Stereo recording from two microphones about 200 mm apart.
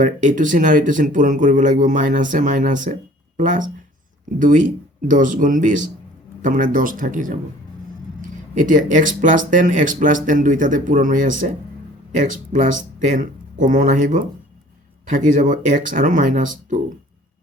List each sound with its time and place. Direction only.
0.0 s speech: 40° right (ahead or behind)
8.5 s speech: 40° right (ahead or behind)